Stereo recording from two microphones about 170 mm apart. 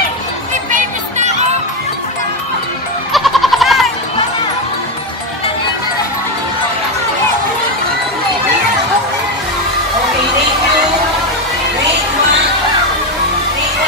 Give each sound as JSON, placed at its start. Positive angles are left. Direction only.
{"t": 0.7, "sound": "music", "side_deg": -45}
{"t": 3.1, "sound": "goat", "side_deg": 0}